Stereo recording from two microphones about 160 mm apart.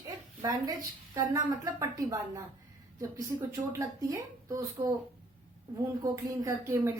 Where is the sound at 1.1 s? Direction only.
20° right (ahead or behind).